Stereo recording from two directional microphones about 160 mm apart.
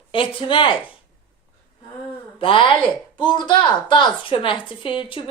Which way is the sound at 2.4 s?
30° left (ahead or behind).